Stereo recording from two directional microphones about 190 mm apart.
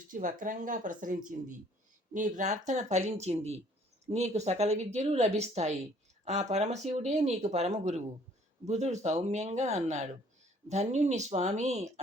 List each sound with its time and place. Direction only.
0.1 s speech: 45° right (ahead or behind)